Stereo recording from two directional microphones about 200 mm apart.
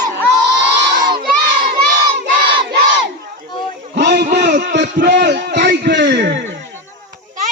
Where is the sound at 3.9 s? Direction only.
55° right (ahead or behind).